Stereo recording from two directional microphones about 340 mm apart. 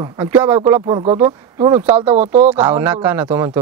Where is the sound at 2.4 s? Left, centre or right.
Centre.